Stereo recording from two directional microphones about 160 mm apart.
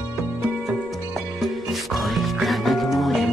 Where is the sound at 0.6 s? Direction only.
Centre (ahead or behind).